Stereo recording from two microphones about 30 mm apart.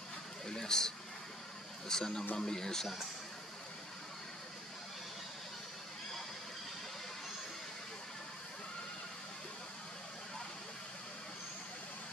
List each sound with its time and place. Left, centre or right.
0.5 s speech: left